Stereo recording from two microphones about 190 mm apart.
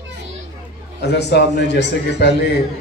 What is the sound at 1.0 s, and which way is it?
A man's voice, 65° left (ahead or behind).